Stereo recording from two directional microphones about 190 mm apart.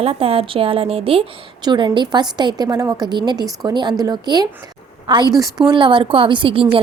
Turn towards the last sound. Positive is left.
turn(degrees=-30)  # may be behind; listen again after turning